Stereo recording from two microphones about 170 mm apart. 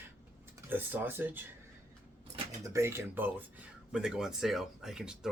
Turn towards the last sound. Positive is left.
turn(degrees=-5)  # may be behind; listen again after turning